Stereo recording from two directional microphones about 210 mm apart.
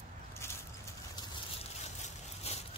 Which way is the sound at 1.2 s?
30° left (ahead or behind).